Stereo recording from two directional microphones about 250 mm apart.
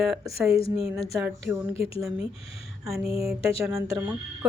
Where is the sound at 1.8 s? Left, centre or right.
Left.